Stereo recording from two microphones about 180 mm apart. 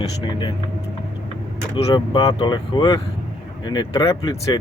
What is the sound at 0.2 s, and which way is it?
Speech, 25° left (ahead or behind).